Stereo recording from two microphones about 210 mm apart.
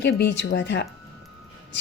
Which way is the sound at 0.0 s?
55° left (ahead or behind).